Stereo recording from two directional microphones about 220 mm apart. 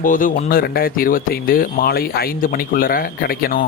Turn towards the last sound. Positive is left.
turn(degrees=40)  # may be behind; listen again after turning